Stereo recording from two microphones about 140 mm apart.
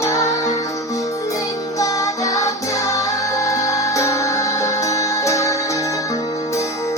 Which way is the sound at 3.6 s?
20° left (ahead or behind).